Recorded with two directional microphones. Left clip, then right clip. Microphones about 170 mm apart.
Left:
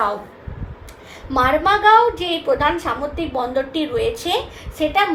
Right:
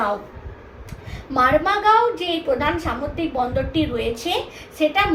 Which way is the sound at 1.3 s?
50° left (ahead or behind).